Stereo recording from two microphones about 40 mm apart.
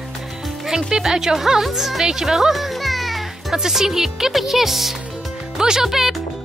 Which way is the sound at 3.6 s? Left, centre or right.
Centre.